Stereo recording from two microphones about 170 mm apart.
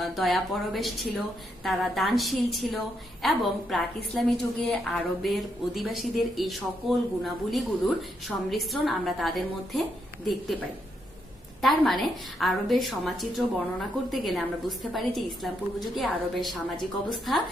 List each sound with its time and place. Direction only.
0.0 s a woman's voice: centre (ahead or behind)
11.6 s a woman's voice: centre (ahead or behind)